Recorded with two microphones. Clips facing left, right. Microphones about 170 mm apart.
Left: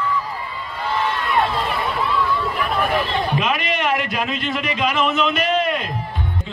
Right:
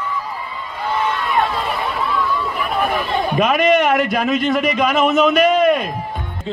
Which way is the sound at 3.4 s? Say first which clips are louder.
Right 8 dB; 50° right (ahead or behind).